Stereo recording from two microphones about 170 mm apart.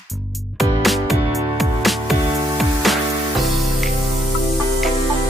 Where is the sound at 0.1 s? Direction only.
Centre (ahead or behind).